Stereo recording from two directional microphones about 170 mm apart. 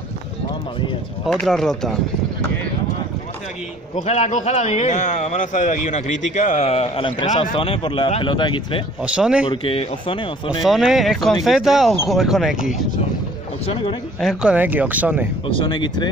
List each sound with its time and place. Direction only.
1.2 s speech: centre (ahead or behind)
3.9 s a man's voice: 40° left (ahead or behind)
9.0 s speech: 5° right (ahead or behind)
9.5 s speech: 30° left (ahead or behind)
10.6 s speech: centre (ahead or behind)
14.2 s speech: 5° right (ahead or behind)
15.4 s speech: 30° left (ahead or behind)